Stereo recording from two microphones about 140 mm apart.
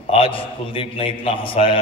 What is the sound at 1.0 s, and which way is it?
Speech, 45° left (ahead or behind).